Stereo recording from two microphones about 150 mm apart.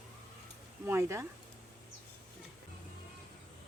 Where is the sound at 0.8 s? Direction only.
15° right (ahead or behind).